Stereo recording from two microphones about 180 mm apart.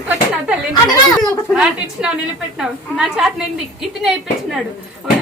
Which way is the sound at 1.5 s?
5° right (ahead or behind).